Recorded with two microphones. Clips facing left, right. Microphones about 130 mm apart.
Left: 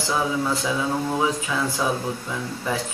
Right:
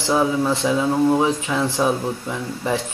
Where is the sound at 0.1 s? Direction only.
25° right (ahead or behind).